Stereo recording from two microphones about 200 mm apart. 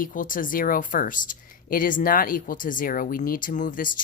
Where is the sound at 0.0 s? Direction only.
40° left (ahead or behind).